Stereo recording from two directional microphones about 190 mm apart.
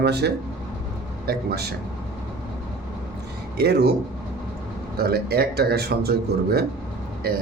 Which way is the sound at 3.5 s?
60° right (ahead or behind).